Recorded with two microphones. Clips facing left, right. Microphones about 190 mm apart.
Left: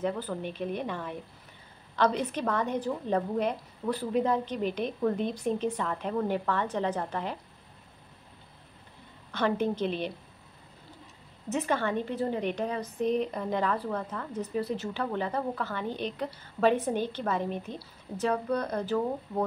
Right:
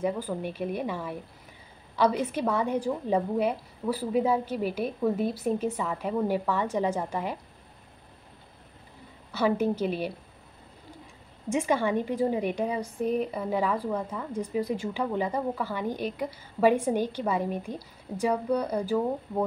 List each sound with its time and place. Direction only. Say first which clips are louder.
0.0 s a woman's voice: right 2 dB; 10° right (ahead or behind)
9.3 s a woman's voice: right 3 dB; 10° right (ahead or behind)
11.4 s a woman's voice: right 3 dB; 10° right (ahead or behind)